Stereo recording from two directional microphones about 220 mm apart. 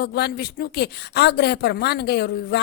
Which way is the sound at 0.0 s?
50° left (ahead or behind).